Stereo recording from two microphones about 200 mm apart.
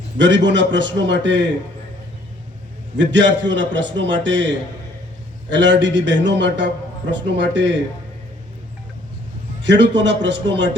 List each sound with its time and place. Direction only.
0.2 s a man's voice: 60° right (ahead or behind)
3.0 s a man's voice: 65° right (ahead or behind)
9.6 s a man's voice: 60° right (ahead or behind)